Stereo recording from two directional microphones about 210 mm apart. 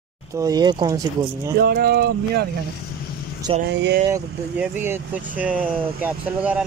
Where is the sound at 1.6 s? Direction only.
45° right (ahead or behind).